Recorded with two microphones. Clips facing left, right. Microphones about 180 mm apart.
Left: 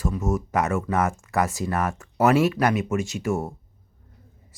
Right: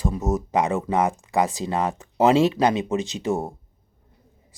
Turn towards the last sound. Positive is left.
turn(degrees=-20)  # may be behind; listen again after turning